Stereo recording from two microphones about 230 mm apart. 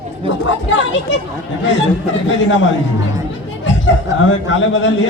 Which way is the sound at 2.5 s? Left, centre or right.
Left.